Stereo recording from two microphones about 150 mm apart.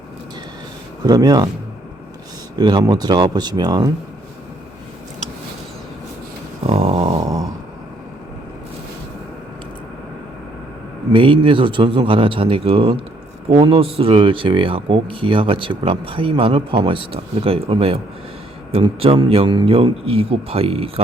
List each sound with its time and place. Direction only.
1.0 s speech: 25° right (ahead or behind)
2.6 s speech: 30° right (ahead or behind)
6.7 s a sound: 40° right (ahead or behind)
11.1 s speech: 35° right (ahead or behind)